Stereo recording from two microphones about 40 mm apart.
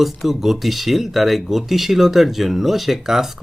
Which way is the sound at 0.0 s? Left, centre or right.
Centre.